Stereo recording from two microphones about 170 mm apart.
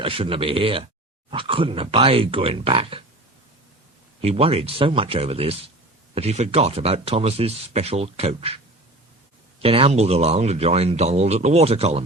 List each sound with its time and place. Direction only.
0.0 s speech: 30° right (ahead or behind)
4.2 s speech: 35° right (ahead or behind)
9.6 s speech: 35° right (ahead or behind)